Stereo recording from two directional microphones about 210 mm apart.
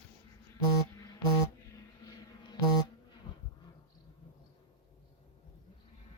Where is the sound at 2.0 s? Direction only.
15° left (ahead or behind).